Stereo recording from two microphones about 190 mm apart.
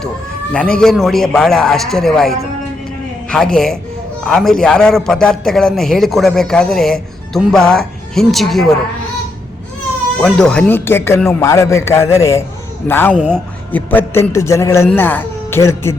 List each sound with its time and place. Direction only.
0.5 s a man's voice: 5° left (ahead or behind)
10.2 s speech: 5° left (ahead or behind)